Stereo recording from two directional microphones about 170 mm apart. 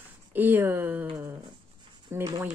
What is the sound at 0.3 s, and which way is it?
Speech, 10° right (ahead or behind).